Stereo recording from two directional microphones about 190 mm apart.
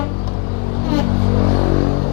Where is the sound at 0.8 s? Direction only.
25° left (ahead or behind).